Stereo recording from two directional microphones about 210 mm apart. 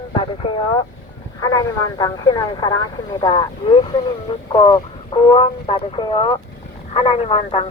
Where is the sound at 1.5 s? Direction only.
20° left (ahead or behind).